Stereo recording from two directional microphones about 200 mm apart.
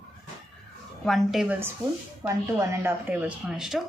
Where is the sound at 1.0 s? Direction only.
Centre (ahead or behind).